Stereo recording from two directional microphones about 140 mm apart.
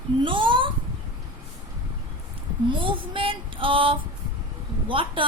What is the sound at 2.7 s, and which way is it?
Female singing, 35° right (ahead or behind).